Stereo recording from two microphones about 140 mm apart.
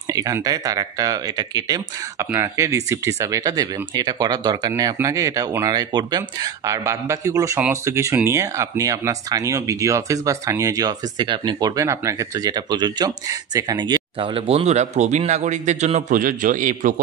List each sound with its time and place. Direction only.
0.1 s speech: 25° right (ahead or behind); by 16.9 s 70° right (ahead or behind)